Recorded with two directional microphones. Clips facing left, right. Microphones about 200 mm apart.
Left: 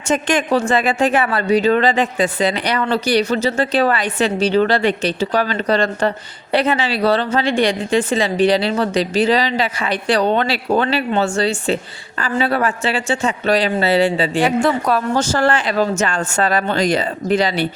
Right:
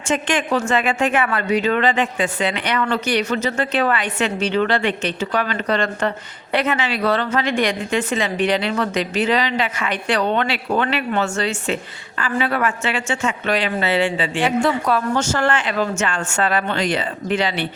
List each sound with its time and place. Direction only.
0.1 s a woman's voice: 40° left (ahead or behind)